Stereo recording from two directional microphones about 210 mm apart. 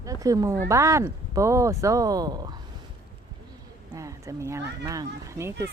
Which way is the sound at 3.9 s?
15° right (ahead or behind).